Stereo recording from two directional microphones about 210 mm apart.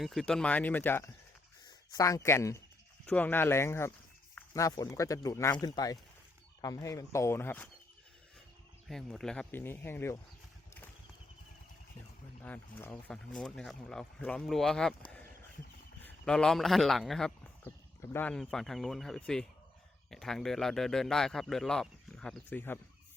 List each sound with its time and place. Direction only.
0.0 s speech: centre (ahead or behind)
8.9 s speech: centre (ahead or behind)
12.4 s a man's voice: 10° left (ahead or behind)
16.0 s a man's voice: 5° left (ahead or behind)